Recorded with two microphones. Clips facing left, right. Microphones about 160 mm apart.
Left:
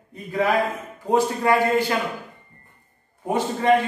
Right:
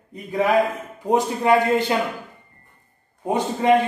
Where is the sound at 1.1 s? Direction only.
20° right (ahead or behind).